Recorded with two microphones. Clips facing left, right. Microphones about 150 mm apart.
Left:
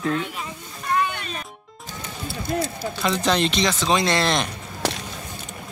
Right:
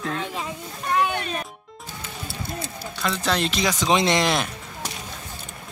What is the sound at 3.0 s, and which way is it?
Speech, centre (ahead or behind).